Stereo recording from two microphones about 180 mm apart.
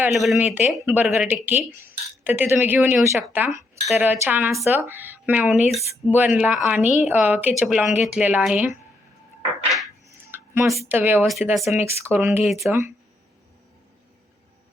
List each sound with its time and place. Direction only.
0.1 s speech: centre (ahead or behind)
9.6 s a sound: centre (ahead or behind)
10.1 s a sound: 15° right (ahead or behind)
10.8 s speech: 10° right (ahead or behind)
11.3 s speech: centre (ahead or behind)
11.8 s speech: 15° right (ahead or behind)
12.5 s speech: centre (ahead or behind)